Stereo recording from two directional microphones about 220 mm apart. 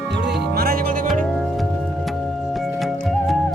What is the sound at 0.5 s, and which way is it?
Music, 40° right (ahead or behind).